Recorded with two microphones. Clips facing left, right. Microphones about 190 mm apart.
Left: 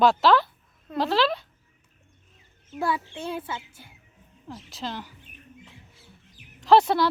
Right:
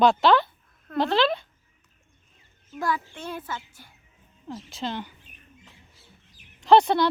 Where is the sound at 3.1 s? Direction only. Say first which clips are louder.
Left 3 dB; 30° left (ahead or behind).